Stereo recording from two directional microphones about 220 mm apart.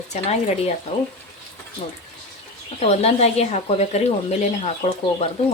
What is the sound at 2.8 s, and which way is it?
A woman's voice, 30° left (ahead or behind).